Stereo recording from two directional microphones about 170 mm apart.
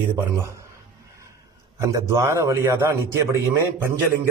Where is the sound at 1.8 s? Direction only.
20° right (ahead or behind).